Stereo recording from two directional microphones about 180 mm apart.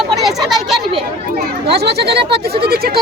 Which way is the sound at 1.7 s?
65° right (ahead or behind).